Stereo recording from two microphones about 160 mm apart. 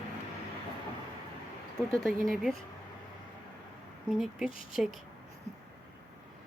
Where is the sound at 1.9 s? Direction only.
Centre (ahead or behind).